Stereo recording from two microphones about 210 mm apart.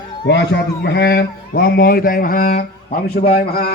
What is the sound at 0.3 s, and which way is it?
Speech, 55° left (ahead or behind).